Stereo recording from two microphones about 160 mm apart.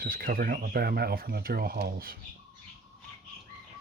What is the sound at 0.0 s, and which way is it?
Speech, 70° right (ahead or behind).